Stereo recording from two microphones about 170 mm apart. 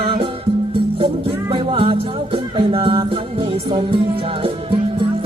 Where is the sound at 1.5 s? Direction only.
30° right (ahead or behind).